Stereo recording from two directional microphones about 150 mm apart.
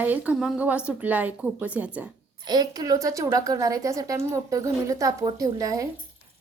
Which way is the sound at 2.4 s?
25° right (ahead or behind).